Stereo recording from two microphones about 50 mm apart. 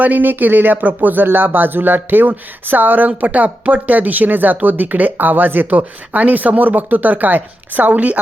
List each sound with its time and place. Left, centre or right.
0.0 s speech: right